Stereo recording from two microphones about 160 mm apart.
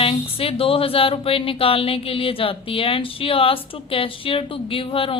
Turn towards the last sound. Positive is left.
turn(degrees=35)  # may be behind; listen again after turning